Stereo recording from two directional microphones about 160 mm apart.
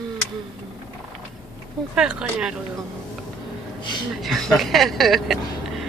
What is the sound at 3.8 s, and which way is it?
Gasp, 30° left (ahead or behind).